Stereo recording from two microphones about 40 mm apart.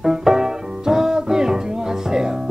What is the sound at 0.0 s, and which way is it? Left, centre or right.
Music, centre.